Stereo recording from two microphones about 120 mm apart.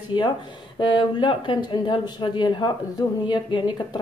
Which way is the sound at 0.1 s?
40° left (ahead or behind).